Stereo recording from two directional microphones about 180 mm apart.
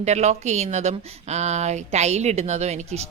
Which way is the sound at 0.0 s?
40° right (ahead or behind).